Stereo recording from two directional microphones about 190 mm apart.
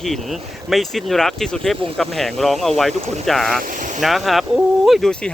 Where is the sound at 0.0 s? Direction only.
Centre (ahead or behind).